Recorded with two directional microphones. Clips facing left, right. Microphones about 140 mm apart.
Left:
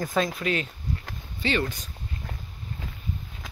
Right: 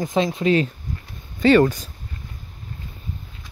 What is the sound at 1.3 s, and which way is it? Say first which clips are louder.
Speech: right 13 dB; 45° right (ahead or behind).